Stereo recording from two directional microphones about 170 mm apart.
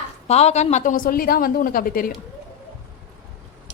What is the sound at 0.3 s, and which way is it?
A woman's voice, 40° left (ahead or behind).